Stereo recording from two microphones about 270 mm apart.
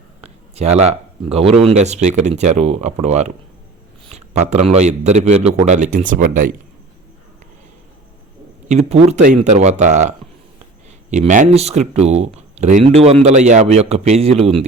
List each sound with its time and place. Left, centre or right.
0.2 s a sound: right
1.8 s a man's voice: right
8.7 s speech: right